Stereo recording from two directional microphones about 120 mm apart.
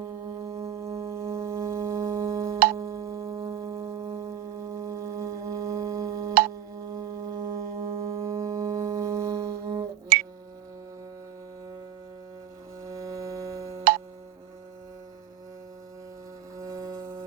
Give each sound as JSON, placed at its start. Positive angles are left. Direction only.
{"t": 0.0, "sound": "music", "side_deg": -25}
{"t": 12.8, "sound": "music", "side_deg": -25}
{"t": 16.6, "sound": "music", "side_deg": -25}